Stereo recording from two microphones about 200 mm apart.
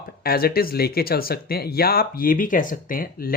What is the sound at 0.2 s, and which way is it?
Speech, 50° left (ahead or behind).